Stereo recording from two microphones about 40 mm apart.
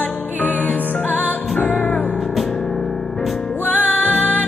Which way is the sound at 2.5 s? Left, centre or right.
Centre.